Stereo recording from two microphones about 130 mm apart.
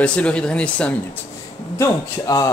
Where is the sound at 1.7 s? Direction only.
25° left (ahead or behind).